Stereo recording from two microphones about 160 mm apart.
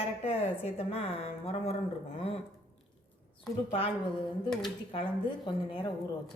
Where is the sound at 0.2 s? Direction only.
40° left (ahead or behind).